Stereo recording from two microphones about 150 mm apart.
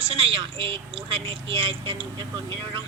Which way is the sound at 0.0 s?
40° right (ahead or behind).